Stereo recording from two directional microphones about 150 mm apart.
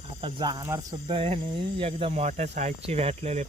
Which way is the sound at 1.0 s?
40° right (ahead or behind).